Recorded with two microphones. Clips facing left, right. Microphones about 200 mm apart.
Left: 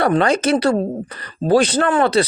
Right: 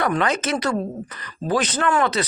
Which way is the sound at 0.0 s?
30° left (ahead or behind).